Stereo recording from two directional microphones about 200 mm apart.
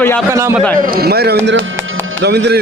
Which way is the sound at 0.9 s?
50° right (ahead or behind).